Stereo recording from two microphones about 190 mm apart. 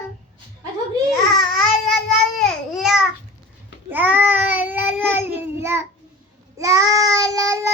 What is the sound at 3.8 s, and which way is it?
Child singing, 10° right (ahead or behind).